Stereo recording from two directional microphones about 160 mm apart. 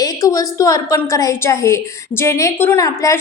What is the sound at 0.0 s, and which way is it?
A woman's voice, 20° left (ahead or behind).